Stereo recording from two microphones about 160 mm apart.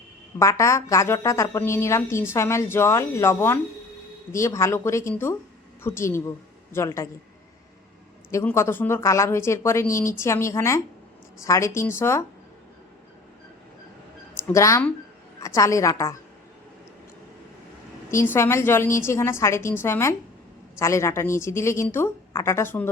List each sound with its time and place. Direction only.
0.3 s a woman's voice: 20° left (ahead or behind)
8.3 s a woman's voice: 15° left (ahead or behind)
14.4 s a woman's voice: 20° left (ahead or behind)
18.1 s a woman's voice: 15° left (ahead or behind)